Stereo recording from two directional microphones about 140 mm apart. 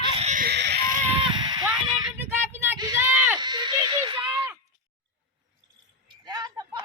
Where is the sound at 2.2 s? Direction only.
15° right (ahead or behind).